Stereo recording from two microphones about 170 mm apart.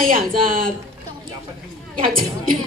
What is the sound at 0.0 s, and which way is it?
Speech, 55° right (ahead or behind).